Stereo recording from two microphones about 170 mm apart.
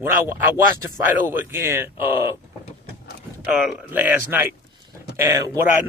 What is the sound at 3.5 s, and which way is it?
Speech, 10° right (ahead or behind).